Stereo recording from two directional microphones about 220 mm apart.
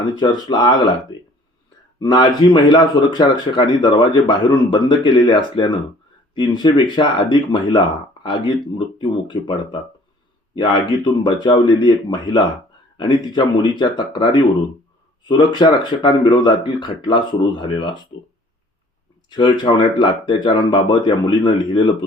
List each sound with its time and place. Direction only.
0.2 s speech: 20° left (ahead or behind)
2.0 s speech: 20° left (ahead or behind)
19.3 s speech: 20° left (ahead or behind)